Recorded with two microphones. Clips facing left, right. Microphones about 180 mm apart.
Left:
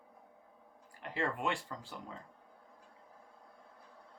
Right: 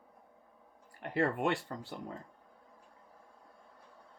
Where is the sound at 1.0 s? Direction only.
55° right (ahead or behind).